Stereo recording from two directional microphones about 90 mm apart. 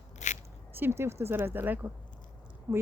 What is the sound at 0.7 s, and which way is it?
Speech, 25° right (ahead or behind).